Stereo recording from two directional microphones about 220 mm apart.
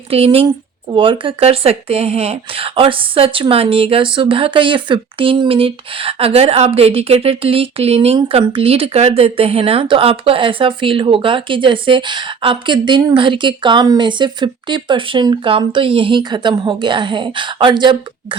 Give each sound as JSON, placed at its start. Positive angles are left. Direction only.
{"t": 0.1, "sound": "speech", "side_deg": -25}